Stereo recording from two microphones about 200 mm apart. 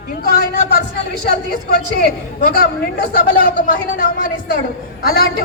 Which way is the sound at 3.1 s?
50° left (ahead or behind).